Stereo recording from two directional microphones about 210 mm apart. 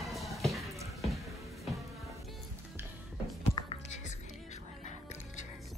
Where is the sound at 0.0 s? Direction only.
Centre (ahead or behind).